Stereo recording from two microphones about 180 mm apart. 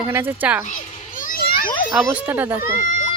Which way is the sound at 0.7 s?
50° left (ahead or behind).